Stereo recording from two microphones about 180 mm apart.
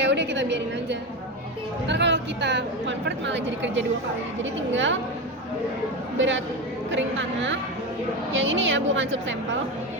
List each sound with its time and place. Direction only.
0.0 s a woman's voice: 80° right
6.1 s a woman's voice: 90° right